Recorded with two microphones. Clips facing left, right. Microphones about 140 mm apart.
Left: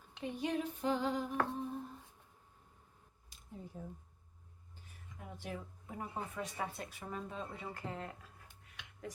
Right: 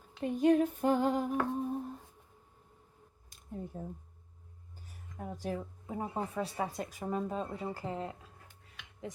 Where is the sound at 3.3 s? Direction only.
55° right (ahead or behind).